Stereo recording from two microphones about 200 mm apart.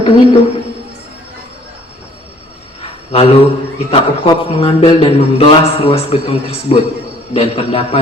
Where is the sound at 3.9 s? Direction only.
30° left (ahead or behind).